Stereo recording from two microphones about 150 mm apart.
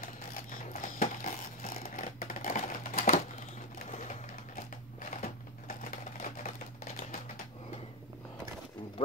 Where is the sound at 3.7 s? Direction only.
45° left (ahead or behind).